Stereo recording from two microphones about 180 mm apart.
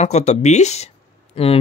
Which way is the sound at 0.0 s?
40° left (ahead or behind).